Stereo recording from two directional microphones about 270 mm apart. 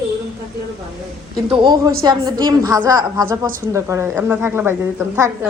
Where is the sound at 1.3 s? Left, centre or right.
Centre.